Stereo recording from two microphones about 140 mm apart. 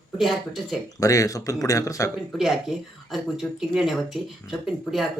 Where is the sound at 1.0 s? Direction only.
25° left (ahead or behind).